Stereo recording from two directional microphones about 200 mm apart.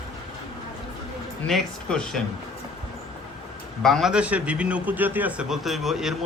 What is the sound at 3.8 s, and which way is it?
A man's voice, centre (ahead or behind).